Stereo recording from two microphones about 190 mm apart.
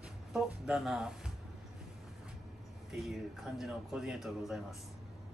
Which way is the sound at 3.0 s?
Centre (ahead or behind).